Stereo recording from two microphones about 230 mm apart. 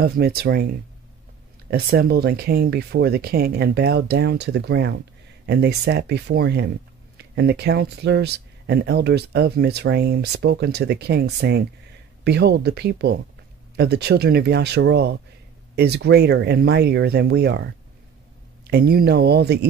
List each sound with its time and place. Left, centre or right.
0.0 s speech: right